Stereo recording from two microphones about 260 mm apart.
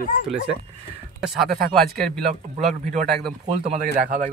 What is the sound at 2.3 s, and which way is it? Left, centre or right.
Speech, right.